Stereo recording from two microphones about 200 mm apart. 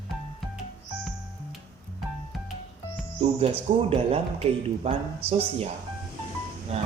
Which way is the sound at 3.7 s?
30° right (ahead or behind).